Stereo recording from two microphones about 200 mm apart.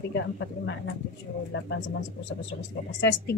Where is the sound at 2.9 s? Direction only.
60° left (ahead or behind).